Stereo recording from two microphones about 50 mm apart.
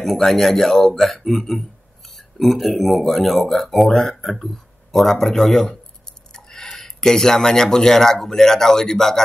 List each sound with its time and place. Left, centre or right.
0.0 s speech: centre